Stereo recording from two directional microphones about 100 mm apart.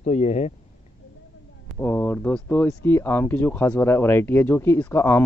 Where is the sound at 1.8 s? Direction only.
15° left (ahead or behind).